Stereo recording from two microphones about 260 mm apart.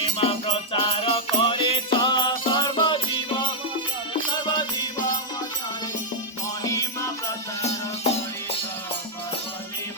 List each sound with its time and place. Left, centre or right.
0.0 s music: left
4.3 s music: centre
6.6 s music: centre